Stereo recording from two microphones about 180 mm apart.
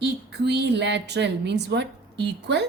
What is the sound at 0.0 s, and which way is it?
Speech, 70° right (ahead or behind).